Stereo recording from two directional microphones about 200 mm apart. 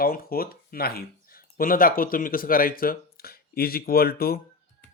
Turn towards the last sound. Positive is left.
turn(degrees=50)  # may be behind; listen again after turning